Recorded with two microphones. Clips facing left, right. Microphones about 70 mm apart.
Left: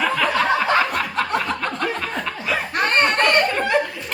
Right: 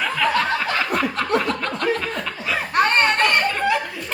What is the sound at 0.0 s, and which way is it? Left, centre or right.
Snicker, centre.